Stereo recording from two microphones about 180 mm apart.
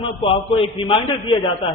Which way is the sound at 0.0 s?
30° left (ahead or behind).